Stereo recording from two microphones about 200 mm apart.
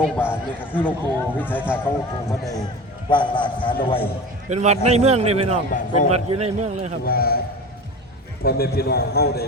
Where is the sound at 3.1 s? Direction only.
25° left (ahead or behind).